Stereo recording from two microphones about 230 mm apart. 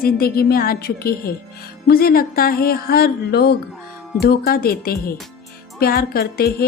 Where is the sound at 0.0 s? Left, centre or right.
Left.